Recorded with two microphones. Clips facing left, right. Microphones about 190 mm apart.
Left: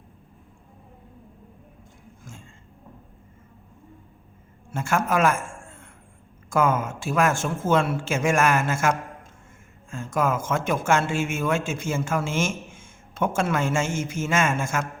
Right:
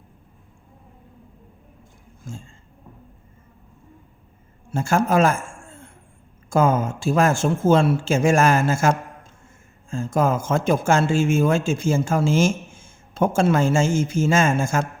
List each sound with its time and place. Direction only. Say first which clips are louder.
4.7 s a man's voice: right 4 dB; 30° right (ahead or behind)